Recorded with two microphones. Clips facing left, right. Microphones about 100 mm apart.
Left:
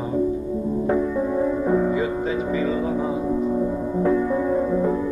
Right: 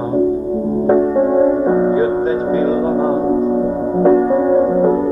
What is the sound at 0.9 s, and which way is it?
Music, 40° right (ahead or behind).